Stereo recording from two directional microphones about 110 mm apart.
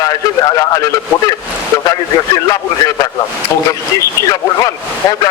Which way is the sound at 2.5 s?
35° left (ahead or behind).